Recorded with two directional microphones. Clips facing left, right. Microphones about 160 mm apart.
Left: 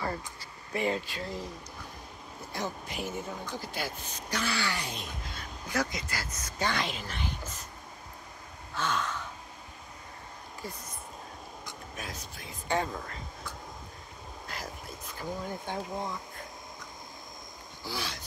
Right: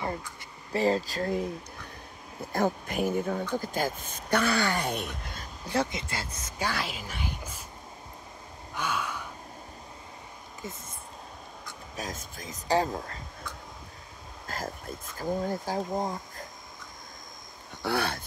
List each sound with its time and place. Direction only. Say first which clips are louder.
0.7 s speech: right 5 dB; 35° right (ahead or behind)
2.5 s speech: right 9 dB; 50° right (ahead or behind)
3.5 s speech: right 7 dB; 45° right (ahead or behind)
5.4 s speech: right 3 dB; 30° right (ahead or behind)
6.6 s speech: left 1 dB; 5° right (ahead or behind)
8.7 s gasp: even; 10° right (ahead or behind)
10.6 s speech: right 1 dB; 25° right (ahead or behind)
11.9 s speech: right 6 dB; 40° right (ahead or behind)
15.1 s speech: right 7 dB; 40° right (ahead or behind)
17.8 s speech: right 9 dB; 60° right (ahead or behind)